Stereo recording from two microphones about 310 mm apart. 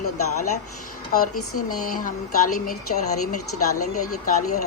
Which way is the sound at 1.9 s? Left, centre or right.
Left.